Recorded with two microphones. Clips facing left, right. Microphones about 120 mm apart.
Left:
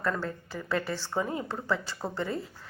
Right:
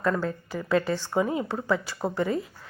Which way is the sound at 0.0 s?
15° right (ahead or behind).